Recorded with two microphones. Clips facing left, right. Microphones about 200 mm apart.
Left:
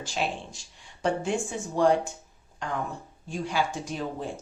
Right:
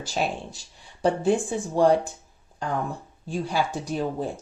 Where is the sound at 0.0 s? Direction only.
40° right (ahead or behind).